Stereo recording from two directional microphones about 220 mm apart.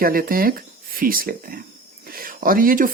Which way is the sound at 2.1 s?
40° right (ahead or behind).